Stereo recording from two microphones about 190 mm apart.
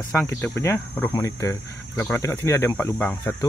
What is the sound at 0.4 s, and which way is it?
Speech, 15° left (ahead or behind).